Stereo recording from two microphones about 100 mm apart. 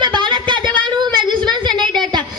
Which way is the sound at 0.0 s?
50° right (ahead or behind).